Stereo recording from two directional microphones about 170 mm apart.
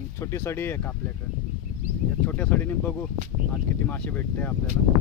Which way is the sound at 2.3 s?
10° left (ahead or behind).